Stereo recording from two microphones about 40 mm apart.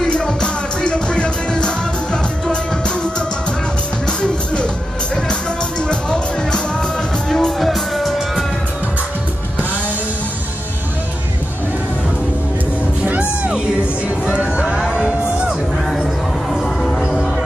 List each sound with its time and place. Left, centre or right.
0.0 s music: left
7.2 s music: centre
14.3 s a sound: right